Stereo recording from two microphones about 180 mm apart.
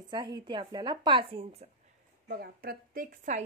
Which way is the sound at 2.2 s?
60° right (ahead or behind).